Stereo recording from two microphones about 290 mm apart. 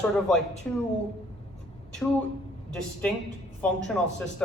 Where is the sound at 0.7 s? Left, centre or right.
Centre.